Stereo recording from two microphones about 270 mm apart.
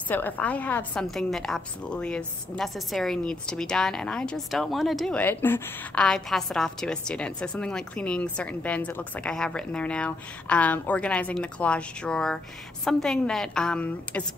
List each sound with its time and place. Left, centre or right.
0.1 s a woman's voice: centre